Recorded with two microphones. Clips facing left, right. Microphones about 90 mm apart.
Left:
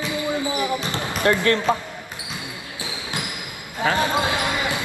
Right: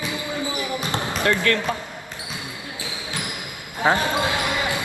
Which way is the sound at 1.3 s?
25° left (ahead or behind).